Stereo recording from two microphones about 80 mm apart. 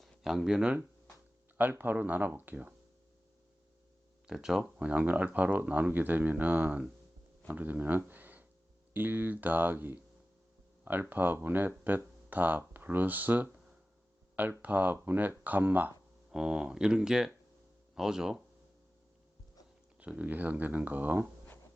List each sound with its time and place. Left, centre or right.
0.0 s speech: centre
1.7 s speech: right
4.3 s speech: centre
4.9 s speech: centre
14.6 s speech: right
16.3 s speech: centre
20.0 s speech: centre